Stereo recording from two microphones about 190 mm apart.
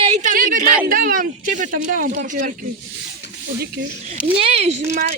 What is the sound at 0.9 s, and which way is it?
Speech, 50° right (ahead or behind).